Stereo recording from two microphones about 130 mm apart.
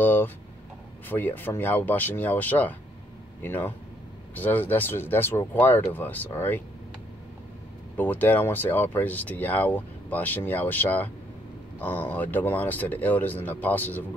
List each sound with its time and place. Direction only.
0.0 s speech: 15° left (ahead or behind)
8.0 s speech: 15° left (ahead or behind)